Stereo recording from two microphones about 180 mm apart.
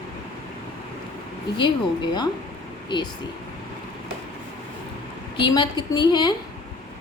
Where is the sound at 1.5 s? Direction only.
25° left (ahead or behind).